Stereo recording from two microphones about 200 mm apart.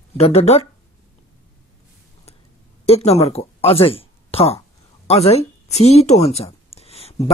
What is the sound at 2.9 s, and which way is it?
Speech, 35° left (ahead or behind).